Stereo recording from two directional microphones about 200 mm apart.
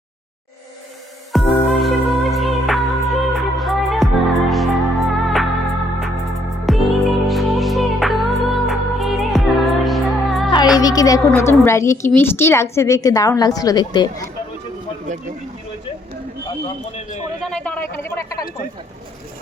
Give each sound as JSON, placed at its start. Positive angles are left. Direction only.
{"t": 1.3, "sound": "music", "side_deg": 0}
{"t": 10.8, "sound": "a woman's voice", "side_deg": 20}
{"t": 17.4, "sound": "speech", "side_deg": 5}